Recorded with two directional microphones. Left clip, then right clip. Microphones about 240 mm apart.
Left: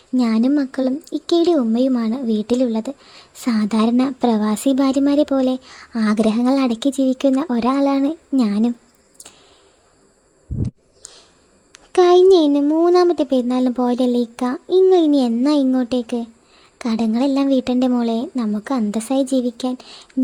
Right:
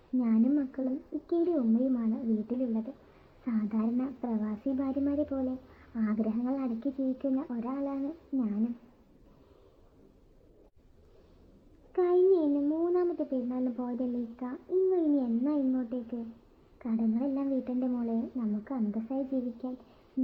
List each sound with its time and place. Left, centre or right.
0.2 s a child's voice: left
11.9 s a child's voice: left